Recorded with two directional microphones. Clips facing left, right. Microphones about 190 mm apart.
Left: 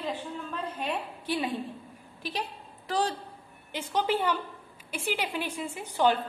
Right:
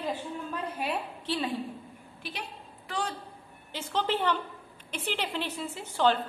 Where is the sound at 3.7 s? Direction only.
10° left (ahead or behind).